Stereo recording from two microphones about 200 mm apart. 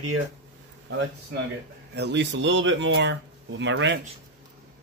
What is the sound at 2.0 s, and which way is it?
Speech, 60° right (ahead or behind).